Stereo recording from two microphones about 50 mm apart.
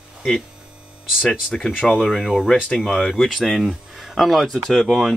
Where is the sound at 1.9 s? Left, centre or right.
Centre.